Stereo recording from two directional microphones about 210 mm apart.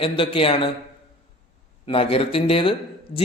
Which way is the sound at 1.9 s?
25° left (ahead or behind).